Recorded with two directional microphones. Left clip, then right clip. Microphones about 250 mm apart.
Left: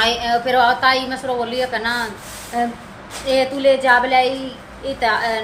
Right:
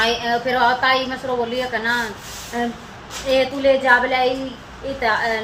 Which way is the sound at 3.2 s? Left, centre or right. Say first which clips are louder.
Left 1 dB; centre.